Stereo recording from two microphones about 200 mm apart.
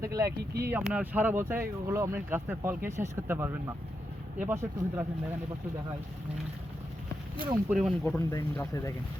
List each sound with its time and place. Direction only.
0.0 s speech: 15° right (ahead or behind)
7.7 s speech: centre (ahead or behind); by 8.9 s 15° left (ahead or behind)